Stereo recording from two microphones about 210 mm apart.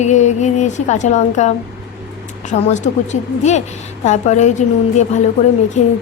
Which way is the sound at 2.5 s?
35° left (ahead or behind).